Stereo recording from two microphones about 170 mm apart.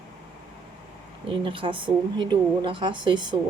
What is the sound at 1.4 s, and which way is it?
A woman's voice, 30° right (ahead or behind).